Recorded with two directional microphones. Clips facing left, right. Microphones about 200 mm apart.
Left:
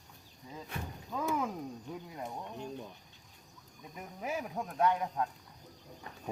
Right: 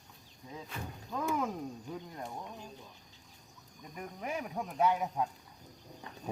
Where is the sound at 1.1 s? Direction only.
Centre (ahead or behind).